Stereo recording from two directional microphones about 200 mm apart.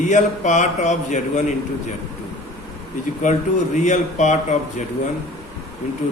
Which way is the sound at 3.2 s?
40° left (ahead or behind).